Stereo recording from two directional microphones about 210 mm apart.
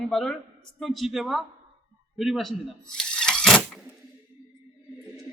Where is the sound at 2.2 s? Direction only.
Centre (ahead or behind).